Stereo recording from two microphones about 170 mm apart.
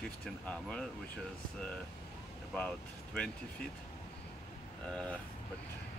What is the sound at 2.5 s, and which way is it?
Speech, 5° left (ahead or behind).